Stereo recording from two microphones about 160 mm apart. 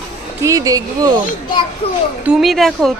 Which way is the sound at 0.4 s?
20° right (ahead or behind).